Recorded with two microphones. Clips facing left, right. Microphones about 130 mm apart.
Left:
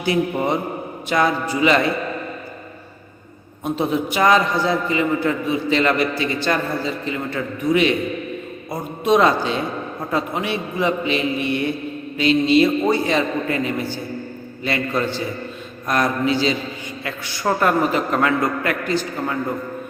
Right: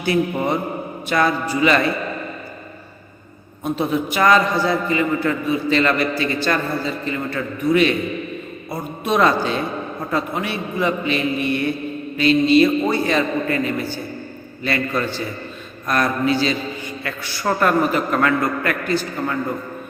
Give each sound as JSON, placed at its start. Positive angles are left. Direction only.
{"t": 0.0, "sound": "a man's voice", "side_deg": 20}
{"t": 3.6, "sound": "a man's voice", "side_deg": 20}